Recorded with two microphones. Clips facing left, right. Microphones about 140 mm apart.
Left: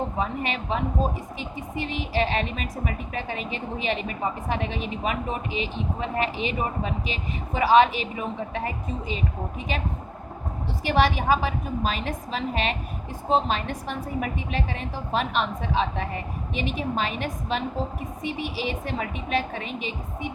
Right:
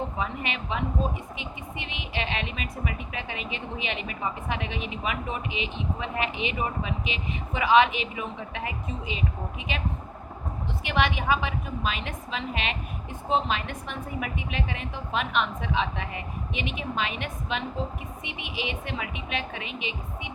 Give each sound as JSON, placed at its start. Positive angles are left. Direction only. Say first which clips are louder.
{"t": 0.2, "sound": "speech", "louder": "left 4 dB", "side_deg": 35}
{"t": 10.8, "sound": "speech", "louder": "left 4 dB", "side_deg": 35}